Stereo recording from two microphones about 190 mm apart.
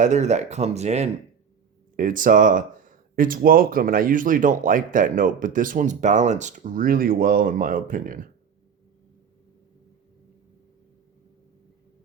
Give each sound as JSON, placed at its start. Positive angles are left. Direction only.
{"t": 0.0, "sound": "speech", "side_deg": -40}